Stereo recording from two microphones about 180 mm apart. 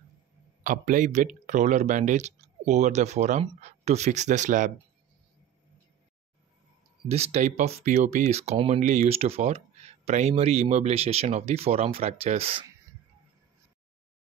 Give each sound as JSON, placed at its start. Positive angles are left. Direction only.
{"t": 0.7, "sound": "speech", "side_deg": -45}
{"t": 7.1, "sound": "speech", "side_deg": -35}